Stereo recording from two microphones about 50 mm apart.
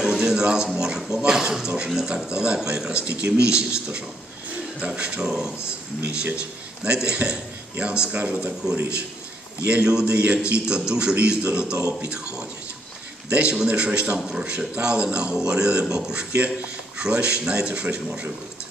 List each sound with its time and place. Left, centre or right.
0.0 s a man's voice: centre
8.1 s a man's voice: right